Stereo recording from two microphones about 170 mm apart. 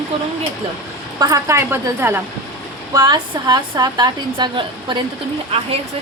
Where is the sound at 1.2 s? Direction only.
20° right (ahead or behind).